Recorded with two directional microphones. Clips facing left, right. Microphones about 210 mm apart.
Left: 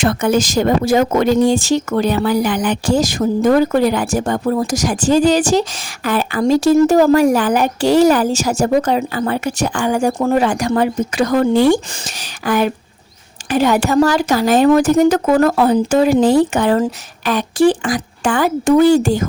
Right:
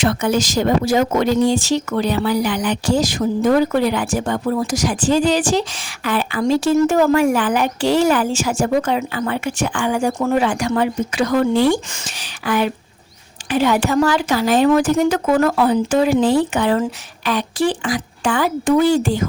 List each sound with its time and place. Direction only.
0.0 s speech: 50° left (ahead or behind)